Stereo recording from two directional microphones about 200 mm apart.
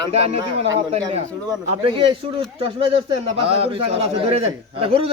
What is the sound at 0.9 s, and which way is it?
A man's voice, 30° right (ahead or behind).